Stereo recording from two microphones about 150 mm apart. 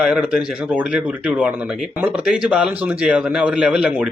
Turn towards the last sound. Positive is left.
turn(degrees=-5)  # may be behind; listen again after turning